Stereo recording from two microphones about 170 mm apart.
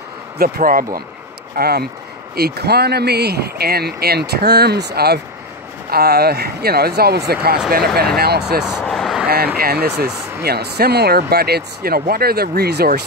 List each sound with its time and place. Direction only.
0.4 s speech: 55° right (ahead or behind)
1.6 s speech: 65° right (ahead or behind)
8.8 s a sound: centre (ahead or behind)
9.6 s speech: 65° right (ahead or behind)